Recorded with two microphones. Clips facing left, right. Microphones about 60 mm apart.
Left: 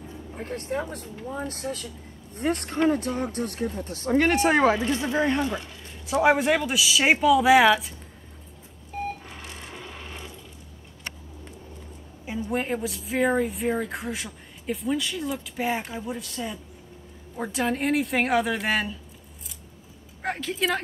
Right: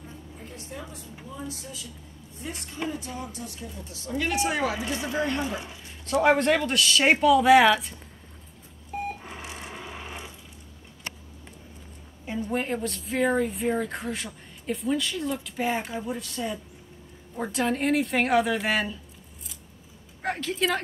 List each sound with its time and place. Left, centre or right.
0.3 s speech: left
5.1 s speech: left
5.4 s speech: centre
6.0 s speech: centre
9.2 s sewing machine: centre
12.3 s speech: centre
20.2 s speech: centre